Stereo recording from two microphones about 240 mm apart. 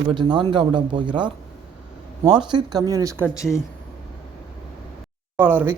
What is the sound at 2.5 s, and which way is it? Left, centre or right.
Speech, centre.